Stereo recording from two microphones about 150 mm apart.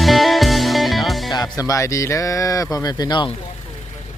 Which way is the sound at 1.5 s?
25° left (ahead or behind).